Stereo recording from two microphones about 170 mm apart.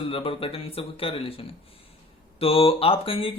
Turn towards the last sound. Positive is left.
turn(degrees=30)  # may be behind; listen again after turning